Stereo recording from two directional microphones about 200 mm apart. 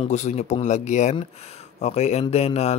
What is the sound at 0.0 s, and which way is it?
Speech, 35° left (ahead or behind).